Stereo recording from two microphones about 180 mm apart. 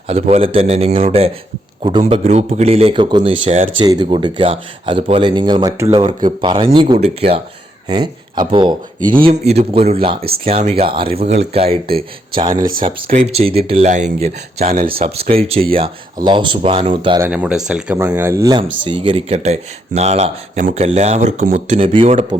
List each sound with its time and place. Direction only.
0.1 s speech: 35° right (ahead or behind)
9.2 s speech: 35° right (ahead or behind)
15.4 s speech: 30° right (ahead or behind)
17.2 s speech: 10° right (ahead or behind); by 22.5 s 35° right (ahead or behind)